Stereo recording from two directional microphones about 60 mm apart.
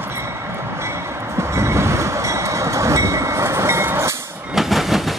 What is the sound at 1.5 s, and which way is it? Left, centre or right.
Train, right.